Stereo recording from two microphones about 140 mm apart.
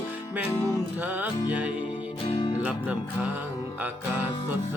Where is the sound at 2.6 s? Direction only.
10° right (ahead or behind).